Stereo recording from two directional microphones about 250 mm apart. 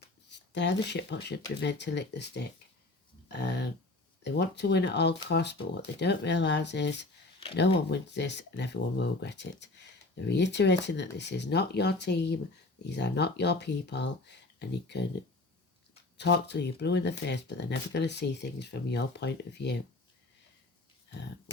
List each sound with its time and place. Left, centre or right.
0.3 s speech: left
3.2 s a sound: left
4.2 s speech: left